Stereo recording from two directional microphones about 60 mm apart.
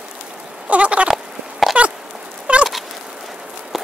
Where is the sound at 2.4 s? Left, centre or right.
Centre.